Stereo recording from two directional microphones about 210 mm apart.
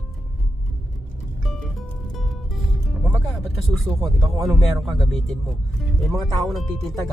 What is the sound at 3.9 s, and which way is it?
Speech, 20° right (ahead or behind).